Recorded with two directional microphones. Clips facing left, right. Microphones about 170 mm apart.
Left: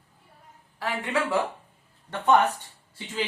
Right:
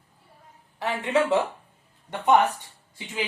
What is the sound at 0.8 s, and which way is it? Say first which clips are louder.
Speech: right 4 dB; 20° right (ahead or behind).